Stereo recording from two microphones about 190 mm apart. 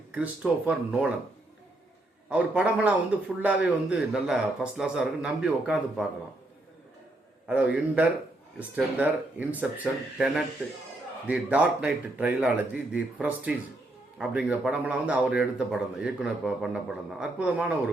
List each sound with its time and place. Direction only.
0.1 s speech: 5° right (ahead or behind)
2.3 s speech: 5° right (ahead or behind)
7.4 s speech: 5° right (ahead or behind)